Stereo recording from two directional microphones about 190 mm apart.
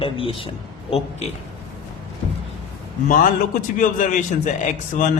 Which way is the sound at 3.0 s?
45° left (ahead or behind).